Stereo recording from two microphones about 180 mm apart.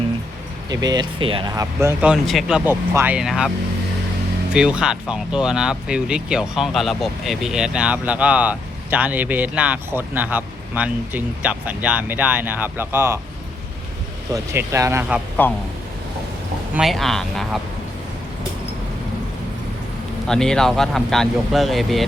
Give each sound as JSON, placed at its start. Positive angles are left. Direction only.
{"t": 0.7, "sound": "speech", "side_deg": -20}
{"t": 4.5, "sound": "speech", "side_deg": -5}
{"t": 14.3, "sound": "speech", "side_deg": -15}
{"t": 15.4, "sound": "speech", "side_deg": 10}
{"t": 16.7, "sound": "speech", "side_deg": 0}
{"t": 20.2, "sound": "speech", "side_deg": 5}